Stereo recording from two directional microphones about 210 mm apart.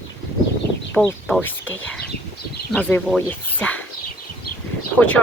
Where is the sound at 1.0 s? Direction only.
5° left (ahead or behind).